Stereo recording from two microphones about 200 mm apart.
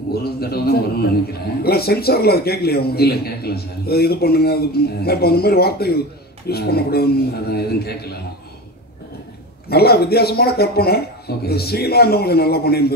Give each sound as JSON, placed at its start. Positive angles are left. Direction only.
{"t": 0.1, "sound": "a man's voice", "side_deg": 50}
{"t": 9.7, "sound": "a man's voice", "side_deg": 50}